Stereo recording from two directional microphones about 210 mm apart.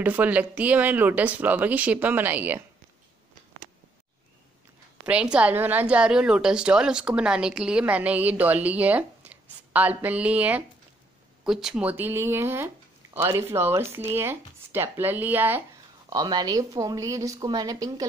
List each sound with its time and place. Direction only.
0.0 s a woman's voice: 10° right (ahead or behind)
5.0 s a woman's voice: 5° right (ahead or behind)
16.1 s a woman's voice: 20° right (ahead or behind)